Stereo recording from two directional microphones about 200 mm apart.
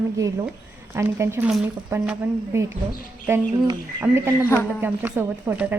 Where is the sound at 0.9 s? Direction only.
15° right (ahead or behind).